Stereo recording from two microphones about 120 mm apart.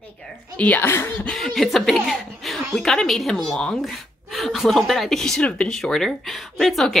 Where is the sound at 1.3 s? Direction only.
5° left (ahead or behind).